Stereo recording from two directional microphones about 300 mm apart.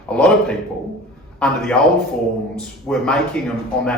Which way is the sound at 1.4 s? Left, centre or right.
Centre.